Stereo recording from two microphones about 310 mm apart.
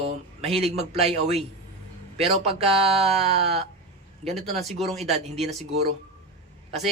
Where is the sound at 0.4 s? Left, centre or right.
Centre.